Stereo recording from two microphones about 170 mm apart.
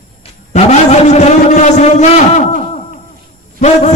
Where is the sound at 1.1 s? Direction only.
45° left (ahead or behind).